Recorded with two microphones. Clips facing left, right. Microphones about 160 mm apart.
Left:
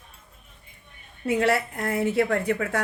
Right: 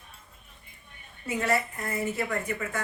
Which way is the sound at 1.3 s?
70° left (ahead or behind).